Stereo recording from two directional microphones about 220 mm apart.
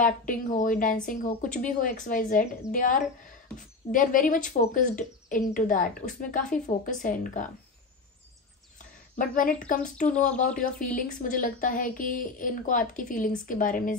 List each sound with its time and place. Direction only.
0.0 s speech: 35° left (ahead or behind)
8.7 s a sound: 35° left (ahead or behind)
9.8 s speech: 35° left (ahead or behind)